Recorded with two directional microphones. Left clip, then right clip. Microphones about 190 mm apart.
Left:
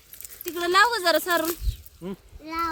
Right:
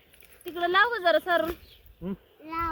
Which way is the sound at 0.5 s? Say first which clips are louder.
Left 3 dB; 15° left (ahead or behind).